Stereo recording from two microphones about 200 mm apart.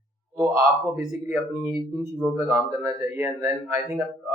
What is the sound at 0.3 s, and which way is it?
Speech, 5° right (ahead or behind).